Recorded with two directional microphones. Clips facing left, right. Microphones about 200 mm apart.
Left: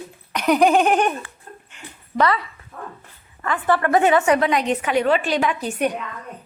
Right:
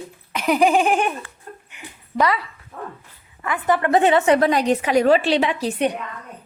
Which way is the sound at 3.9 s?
30° right (ahead or behind).